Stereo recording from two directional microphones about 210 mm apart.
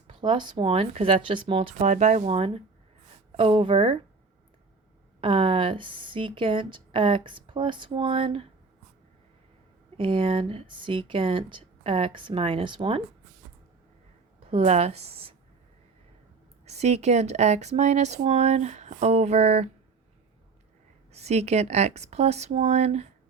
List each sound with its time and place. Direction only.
0.1 s speech: 25° right (ahead or behind)
5.2 s speech: 25° right (ahead or behind)
10.0 s speech: 25° right (ahead or behind)
14.5 s speech: 30° right (ahead or behind)
16.6 s speech: 30° right (ahead or behind)
21.1 s speech: 30° right (ahead or behind)